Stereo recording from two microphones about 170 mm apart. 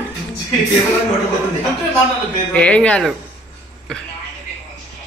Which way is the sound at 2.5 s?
5° left (ahead or behind).